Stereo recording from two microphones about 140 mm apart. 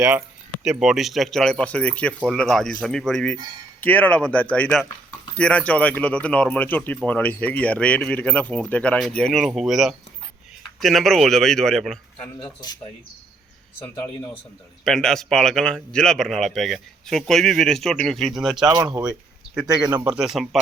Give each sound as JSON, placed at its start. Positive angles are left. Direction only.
{"t": 0.6, "sound": "speech", "side_deg": -5}
{"t": 12.1, "sound": "speech", "side_deg": 35}
{"t": 14.8, "sound": "speech", "side_deg": 5}
{"t": 18.5, "sound": "speech", "side_deg": -30}
{"t": 19.8, "sound": "speech", "side_deg": -5}